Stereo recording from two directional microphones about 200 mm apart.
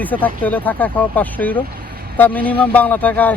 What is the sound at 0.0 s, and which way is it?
Speech, 10° left (ahead or behind).